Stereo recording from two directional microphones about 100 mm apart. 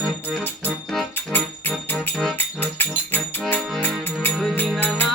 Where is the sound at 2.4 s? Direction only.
20° left (ahead or behind).